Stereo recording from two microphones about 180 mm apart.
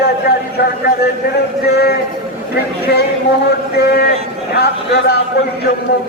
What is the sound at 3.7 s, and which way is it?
A man's voice, 65° left (ahead or behind).